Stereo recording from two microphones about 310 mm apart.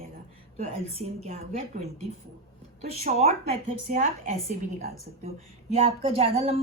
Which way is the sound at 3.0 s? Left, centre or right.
Right.